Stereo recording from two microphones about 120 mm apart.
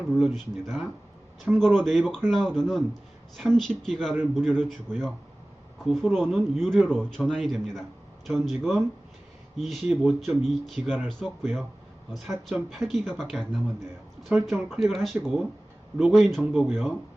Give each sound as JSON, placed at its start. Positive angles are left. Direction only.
{"t": 0.2, "sound": "a man's voice", "side_deg": 0}